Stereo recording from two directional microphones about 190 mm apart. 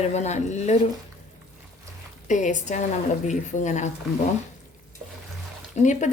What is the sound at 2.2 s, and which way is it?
A woman's voice, 40° left (ahead or behind).